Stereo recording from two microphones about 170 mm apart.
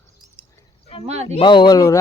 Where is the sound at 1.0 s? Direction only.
40° right (ahead or behind).